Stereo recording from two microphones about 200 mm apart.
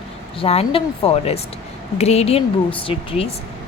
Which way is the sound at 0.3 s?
30° left (ahead or behind).